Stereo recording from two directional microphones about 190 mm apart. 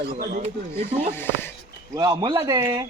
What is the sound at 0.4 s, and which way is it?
Speech, 35° right (ahead or behind).